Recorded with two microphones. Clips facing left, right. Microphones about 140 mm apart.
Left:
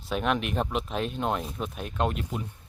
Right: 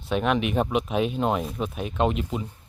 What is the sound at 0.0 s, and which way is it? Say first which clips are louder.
Speech: right 4 dB; centre (ahead or behind).